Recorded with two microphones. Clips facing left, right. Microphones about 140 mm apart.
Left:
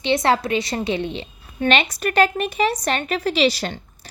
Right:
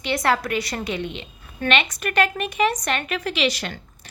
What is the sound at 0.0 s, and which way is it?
A woman's voice, 25° left (ahead or behind).